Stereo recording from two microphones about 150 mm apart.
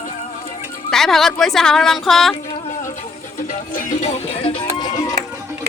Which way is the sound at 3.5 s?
55° left (ahead or behind).